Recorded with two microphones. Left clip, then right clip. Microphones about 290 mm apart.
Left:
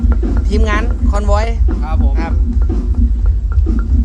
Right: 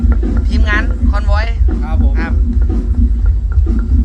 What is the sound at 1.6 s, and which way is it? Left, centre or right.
Speech, centre.